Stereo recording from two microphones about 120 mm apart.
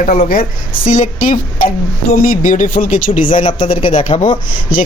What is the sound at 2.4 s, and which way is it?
Speech, 90° left.